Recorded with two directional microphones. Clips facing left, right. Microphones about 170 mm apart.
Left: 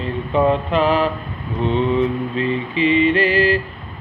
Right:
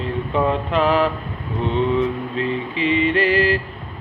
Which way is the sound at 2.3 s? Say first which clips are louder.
Left 2 dB; 90° left.